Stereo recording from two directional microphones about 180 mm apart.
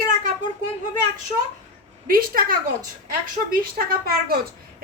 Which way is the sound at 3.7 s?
55° right (ahead or behind).